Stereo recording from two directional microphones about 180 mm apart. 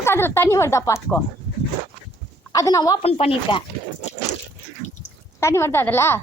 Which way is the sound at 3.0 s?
35° left (ahead or behind).